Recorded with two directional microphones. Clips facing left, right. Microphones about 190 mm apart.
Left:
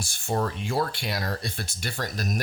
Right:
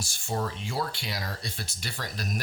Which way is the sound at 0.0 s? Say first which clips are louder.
Left 4 dB; 55° left (ahead or behind).